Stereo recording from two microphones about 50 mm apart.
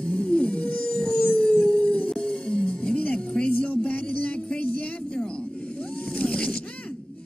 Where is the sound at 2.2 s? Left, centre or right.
Left.